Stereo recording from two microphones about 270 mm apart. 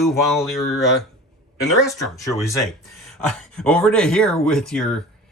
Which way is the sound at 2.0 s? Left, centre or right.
Centre.